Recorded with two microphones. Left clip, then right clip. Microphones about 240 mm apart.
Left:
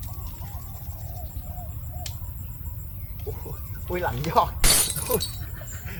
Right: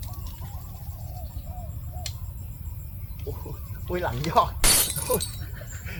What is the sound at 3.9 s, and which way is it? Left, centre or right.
Shatter, centre.